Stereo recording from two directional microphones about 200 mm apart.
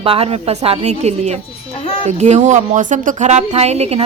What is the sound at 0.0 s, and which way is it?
A woman's voice, 30° right (ahead or behind).